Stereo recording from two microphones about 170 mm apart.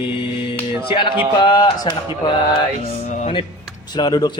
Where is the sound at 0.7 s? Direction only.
15° right (ahead or behind).